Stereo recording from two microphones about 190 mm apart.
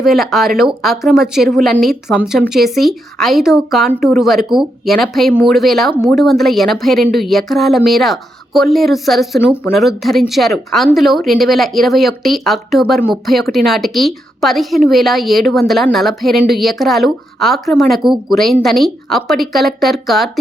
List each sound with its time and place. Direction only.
0.0 s a woman's voice: centre (ahead or behind)